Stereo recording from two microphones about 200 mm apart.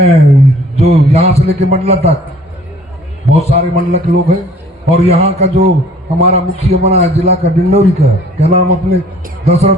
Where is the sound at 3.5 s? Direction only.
50° right (ahead or behind).